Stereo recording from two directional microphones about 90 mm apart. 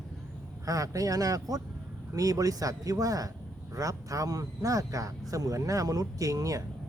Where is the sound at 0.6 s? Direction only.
40° right (ahead or behind).